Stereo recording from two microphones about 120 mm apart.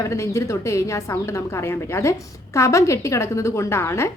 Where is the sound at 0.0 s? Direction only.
25° left (ahead or behind).